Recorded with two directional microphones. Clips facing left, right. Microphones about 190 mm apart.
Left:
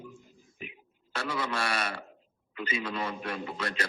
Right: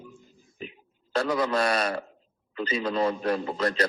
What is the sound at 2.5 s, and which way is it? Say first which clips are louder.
A man's voice: right 7 dB; 35° right (ahead or behind).